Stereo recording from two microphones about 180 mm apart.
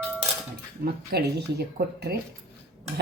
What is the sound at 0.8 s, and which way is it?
Speech, 60° right (ahead or behind).